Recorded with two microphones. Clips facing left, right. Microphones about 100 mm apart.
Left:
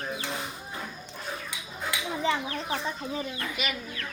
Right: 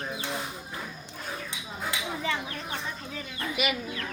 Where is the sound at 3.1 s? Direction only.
30° left (ahead or behind).